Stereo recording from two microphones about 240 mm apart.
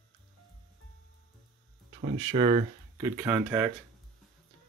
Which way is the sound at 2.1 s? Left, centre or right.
Right.